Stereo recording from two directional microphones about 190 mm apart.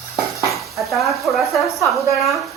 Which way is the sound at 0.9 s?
Centre (ahead or behind).